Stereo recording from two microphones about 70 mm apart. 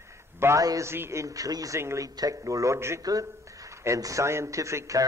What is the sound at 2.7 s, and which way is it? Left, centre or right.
Speech, right.